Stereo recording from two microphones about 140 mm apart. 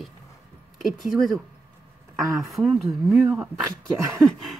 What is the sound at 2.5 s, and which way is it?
Speech, centre (ahead or behind).